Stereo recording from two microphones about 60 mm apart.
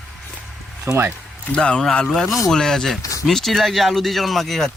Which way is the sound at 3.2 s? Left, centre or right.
Centre.